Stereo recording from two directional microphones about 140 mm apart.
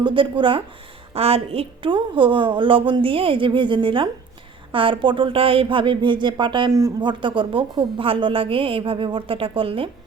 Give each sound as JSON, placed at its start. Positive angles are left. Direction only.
{"t": 0.0, "sound": "speech", "side_deg": -35}